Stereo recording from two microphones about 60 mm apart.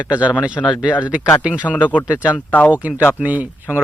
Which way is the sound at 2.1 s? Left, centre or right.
Right.